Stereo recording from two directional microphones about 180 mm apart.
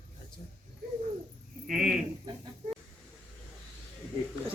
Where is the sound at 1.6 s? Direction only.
50° right (ahead or behind).